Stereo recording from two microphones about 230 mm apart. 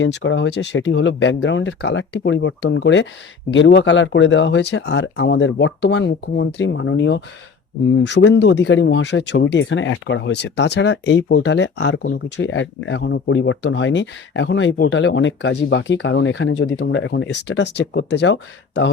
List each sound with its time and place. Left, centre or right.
0.0 s speech: left